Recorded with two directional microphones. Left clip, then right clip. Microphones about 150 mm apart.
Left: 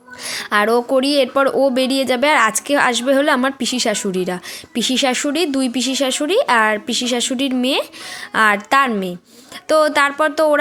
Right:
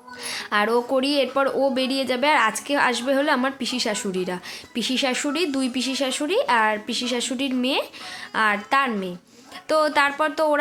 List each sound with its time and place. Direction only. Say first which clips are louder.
0.3 s a woman's voice: left 6 dB; 40° left (ahead or behind)